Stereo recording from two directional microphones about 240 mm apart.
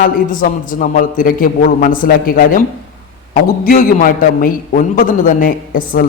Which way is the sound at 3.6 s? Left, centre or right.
Left.